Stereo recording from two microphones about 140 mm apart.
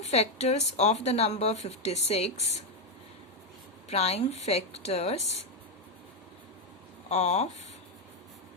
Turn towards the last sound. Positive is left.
turn(degrees=55)  # may be behind; listen again after turning